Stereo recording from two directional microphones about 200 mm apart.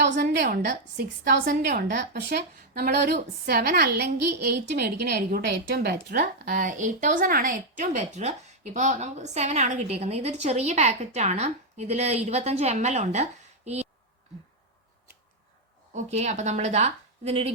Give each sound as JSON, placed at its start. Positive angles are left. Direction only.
{"t": 0.0, "sound": "a sound", "side_deg": -60}
{"t": 0.4, "sound": "a woman's voice", "side_deg": -40}
{"t": 2.0, "sound": "a woman's voice", "side_deg": -55}
{"t": 15.9, "sound": "a woman's voice", "side_deg": -35}